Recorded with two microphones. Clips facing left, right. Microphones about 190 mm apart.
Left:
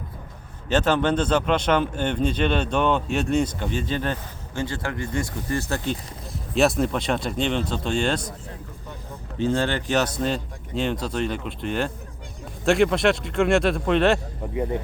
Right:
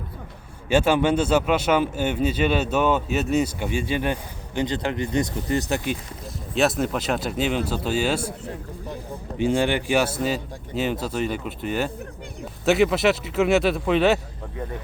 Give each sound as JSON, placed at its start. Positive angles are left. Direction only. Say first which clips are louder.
{"t": 0.7, "sound": "speech", "louder": "right 2 dB", "side_deg": -10}
{"t": 6.5, "sound": "speech", "louder": "left 1 dB", "side_deg": 0}
{"t": 9.4, "sound": "speech", "louder": "right 2 dB", "side_deg": -15}
{"t": 14.5, "sound": "speech", "louder": "left 7 dB", "side_deg": 20}